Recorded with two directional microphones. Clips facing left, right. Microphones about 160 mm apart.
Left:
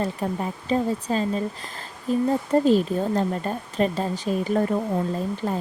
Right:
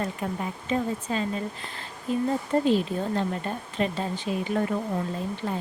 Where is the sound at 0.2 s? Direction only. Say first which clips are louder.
Left 4 dB; 35° left (ahead or behind).